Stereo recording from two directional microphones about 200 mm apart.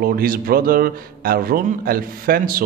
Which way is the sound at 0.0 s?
45° right (ahead or behind).